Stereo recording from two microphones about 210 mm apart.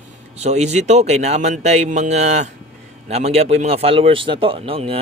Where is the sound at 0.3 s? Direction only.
30° right (ahead or behind).